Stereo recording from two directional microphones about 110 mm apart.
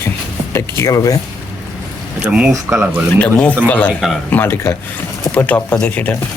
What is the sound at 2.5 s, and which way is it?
Speech, 20° right (ahead or behind).